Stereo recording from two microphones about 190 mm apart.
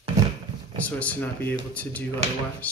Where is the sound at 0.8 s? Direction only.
10° left (ahead or behind).